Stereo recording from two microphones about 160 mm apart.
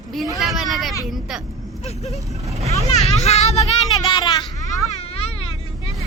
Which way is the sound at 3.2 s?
45° left (ahead or behind).